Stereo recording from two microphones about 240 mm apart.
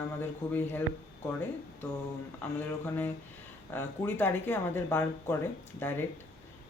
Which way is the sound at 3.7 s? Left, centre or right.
Centre.